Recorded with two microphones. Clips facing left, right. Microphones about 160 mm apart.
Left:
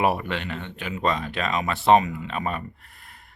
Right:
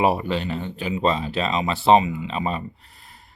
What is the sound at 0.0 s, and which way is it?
Speech, 25° right (ahead or behind).